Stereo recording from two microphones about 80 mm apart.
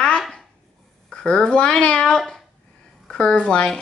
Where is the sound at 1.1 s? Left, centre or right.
Centre.